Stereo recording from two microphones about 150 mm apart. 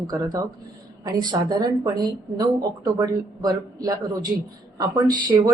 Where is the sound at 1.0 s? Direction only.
25° right (ahead or behind).